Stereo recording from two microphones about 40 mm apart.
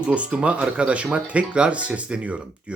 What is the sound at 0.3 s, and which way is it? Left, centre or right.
Speech, right.